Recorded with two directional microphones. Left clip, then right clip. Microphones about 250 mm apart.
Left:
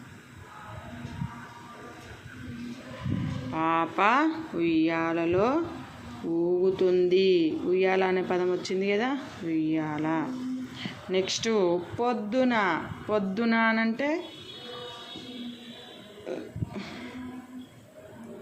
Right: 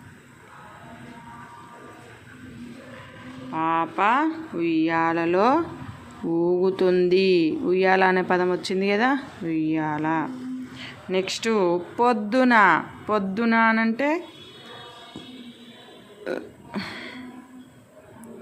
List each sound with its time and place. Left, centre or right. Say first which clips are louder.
3.5 s speech: right 3 dB; centre
16.2 s burping: right 6 dB; right